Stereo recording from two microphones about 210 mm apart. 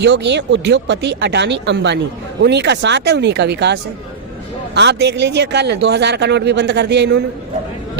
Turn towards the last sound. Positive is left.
turn(degrees=-55)  # may be behind; listen again after turning